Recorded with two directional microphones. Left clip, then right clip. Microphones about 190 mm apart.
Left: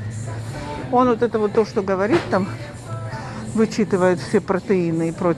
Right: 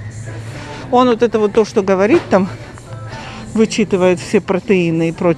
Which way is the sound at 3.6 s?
25° right (ahead or behind).